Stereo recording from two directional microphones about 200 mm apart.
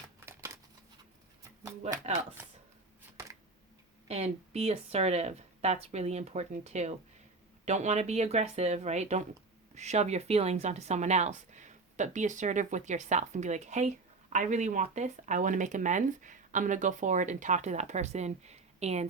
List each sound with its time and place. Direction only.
4.1 s speech: 30° right (ahead or behind)